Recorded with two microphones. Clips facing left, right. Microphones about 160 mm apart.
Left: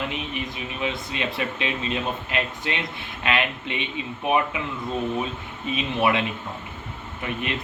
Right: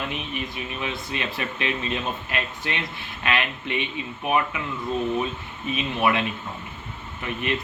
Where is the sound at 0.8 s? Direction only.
20° left (ahead or behind).